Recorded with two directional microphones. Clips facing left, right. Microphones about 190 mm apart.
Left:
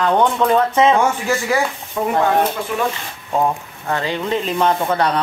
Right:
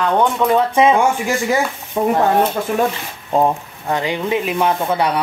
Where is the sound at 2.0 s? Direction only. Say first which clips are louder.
Right 4 dB; 30° right (ahead or behind).